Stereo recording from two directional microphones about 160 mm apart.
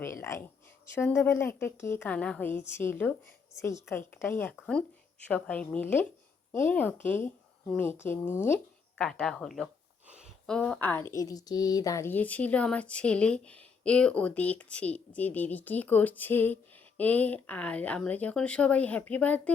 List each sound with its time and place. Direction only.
0.0 s speech: 15° left (ahead or behind)
10.1 s a sound: 5° right (ahead or behind); by 11.0 s 10° left (ahead or behind)
11.1 s speech: 20° left (ahead or behind)